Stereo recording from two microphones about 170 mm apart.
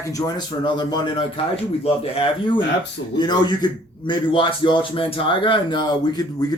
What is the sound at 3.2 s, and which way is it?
A man's voice, 25° left (ahead or behind).